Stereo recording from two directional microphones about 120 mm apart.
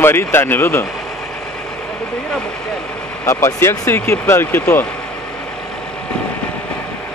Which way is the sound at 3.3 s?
25° left (ahead or behind).